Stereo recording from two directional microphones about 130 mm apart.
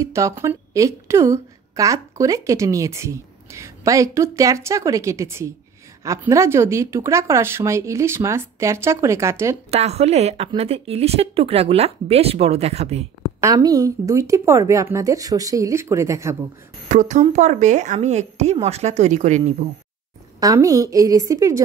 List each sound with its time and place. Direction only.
0.0 s a woman's voice: 25° right (ahead or behind)
9.7 s a woman's voice: 55° right (ahead or behind)
13.4 s a woman's voice: 25° right (ahead or behind)
16.9 s a woman's voice: 70° right (ahead or behind)
20.3 s a woman's voice: 25° right (ahead or behind)